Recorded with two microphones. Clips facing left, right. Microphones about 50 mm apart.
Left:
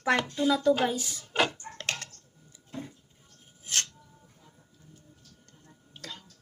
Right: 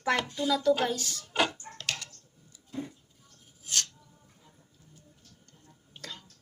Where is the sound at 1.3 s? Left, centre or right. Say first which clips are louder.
Left 1 dB; centre.